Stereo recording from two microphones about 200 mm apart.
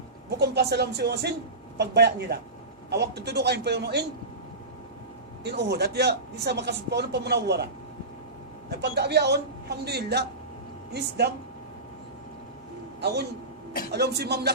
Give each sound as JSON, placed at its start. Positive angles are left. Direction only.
{"t": 0.3, "sound": "a woman's voice", "side_deg": -55}
{"t": 5.4, "sound": "a woman's voice", "side_deg": -55}
{"t": 8.7, "sound": "a woman's voice", "side_deg": -55}
{"t": 13.9, "sound": "a woman's voice", "side_deg": -55}